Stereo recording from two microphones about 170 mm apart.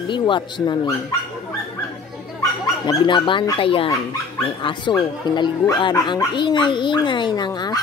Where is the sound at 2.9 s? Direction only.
30° left (ahead or behind).